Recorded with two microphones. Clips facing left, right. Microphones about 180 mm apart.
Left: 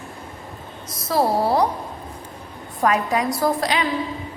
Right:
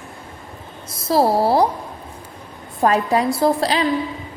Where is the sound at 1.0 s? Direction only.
30° right (ahead or behind).